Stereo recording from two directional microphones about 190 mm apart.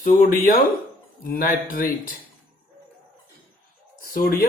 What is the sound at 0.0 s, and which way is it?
A man's voice, 50° left (ahead or behind).